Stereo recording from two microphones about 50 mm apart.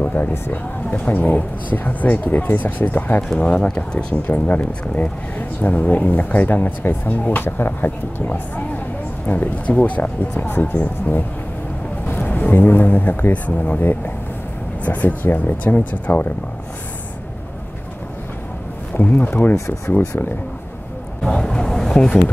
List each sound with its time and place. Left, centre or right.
0.0 s a sound: left
0.3 s speech: left
3.3 s speech: left
4.1 s speech: left
10.4 s speech: left
15.5 s speech: left
18.9 s a sound: left
21.2 s vehicle: centre